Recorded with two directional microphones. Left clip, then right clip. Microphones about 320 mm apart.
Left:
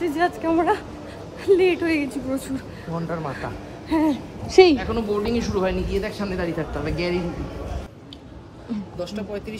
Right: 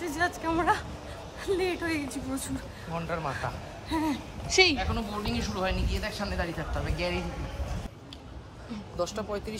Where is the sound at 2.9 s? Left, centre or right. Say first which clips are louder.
Left 4 dB; centre.